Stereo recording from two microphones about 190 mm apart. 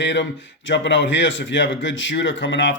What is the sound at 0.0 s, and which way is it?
Speech, 70° left (ahead or behind).